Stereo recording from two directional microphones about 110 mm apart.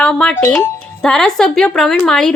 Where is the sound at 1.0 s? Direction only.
5° left (ahead or behind).